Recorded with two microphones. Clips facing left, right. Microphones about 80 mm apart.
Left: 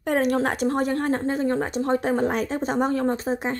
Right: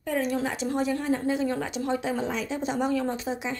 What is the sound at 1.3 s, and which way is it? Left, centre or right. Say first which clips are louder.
Speech: left 3 dB; left.